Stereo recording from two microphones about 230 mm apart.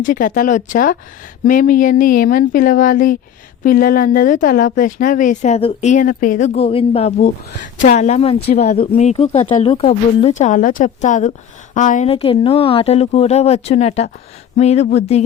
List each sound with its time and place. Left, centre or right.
0.0 s speech: left